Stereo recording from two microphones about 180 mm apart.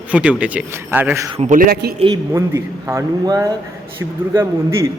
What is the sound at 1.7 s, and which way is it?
Speech, 60° right (ahead or behind).